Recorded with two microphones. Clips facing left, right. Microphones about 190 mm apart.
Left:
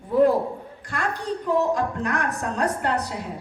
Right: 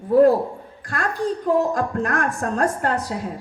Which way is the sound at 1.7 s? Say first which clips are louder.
Right 2 dB; 45° right (ahead or behind).